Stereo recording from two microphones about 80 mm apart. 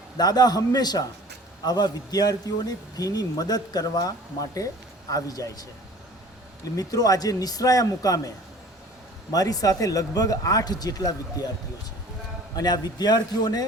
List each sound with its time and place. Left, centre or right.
0.2 s a man's voice: left
6.7 s a man's voice: left
9.3 s a man's voice: left
12.5 s a man's voice: left